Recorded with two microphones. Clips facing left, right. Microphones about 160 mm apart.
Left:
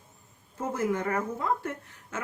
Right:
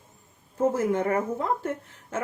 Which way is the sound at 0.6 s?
25° right (ahead or behind).